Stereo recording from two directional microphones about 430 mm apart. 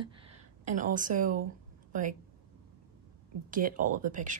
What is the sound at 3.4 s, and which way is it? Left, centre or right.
Speech, centre.